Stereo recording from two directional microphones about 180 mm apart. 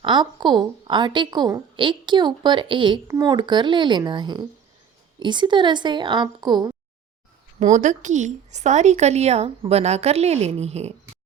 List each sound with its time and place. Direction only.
0.0 s a woman's voice: 25° right (ahead or behind)
7.6 s a woman's voice: 40° right (ahead or behind)